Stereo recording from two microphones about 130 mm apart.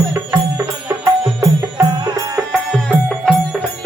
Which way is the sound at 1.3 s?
30° right (ahead or behind).